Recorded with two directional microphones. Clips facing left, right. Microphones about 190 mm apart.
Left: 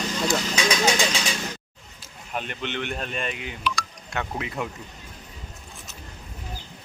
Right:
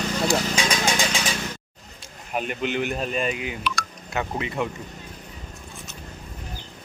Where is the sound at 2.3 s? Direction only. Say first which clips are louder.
Right 5 dB; 10° right (ahead or behind).